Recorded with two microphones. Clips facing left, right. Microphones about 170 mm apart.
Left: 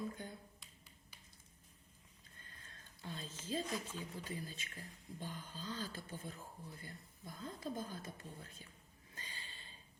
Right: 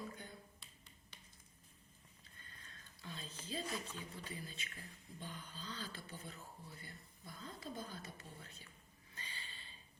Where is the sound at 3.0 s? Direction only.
45° left (ahead or behind).